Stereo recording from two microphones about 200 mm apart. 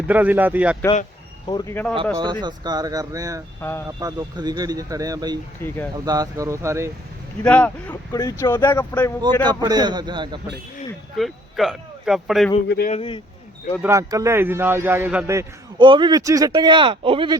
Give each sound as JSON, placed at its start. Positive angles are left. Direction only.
{"t": 0.1, "sound": "a man's voice", "side_deg": -10}
{"t": 1.5, "sound": "speech", "side_deg": 15}
{"t": 2.1, "sound": "speech", "side_deg": -20}
{"t": 3.6, "sound": "speech", "side_deg": 10}
{"t": 3.8, "sound": "speech", "side_deg": -20}
{"t": 5.6, "sound": "speech", "side_deg": 10}
{"t": 6.1, "sound": "a man's voice", "side_deg": -15}
{"t": 7.4, "sound": "speech", "side_deg": 5}
{"t": 9.4, "sound": "speech", "side_deg": -20}
{"t": 11.2, "sound": "speech", "side_deg": 0}
{"t": 12.6, "sound": "speech", "side_deg": 55}
{"t": 12.9, "sound": "speech", "side_deg": 25}
{"t": 13.8, "sound": "a man's voice", "side_deg": -15}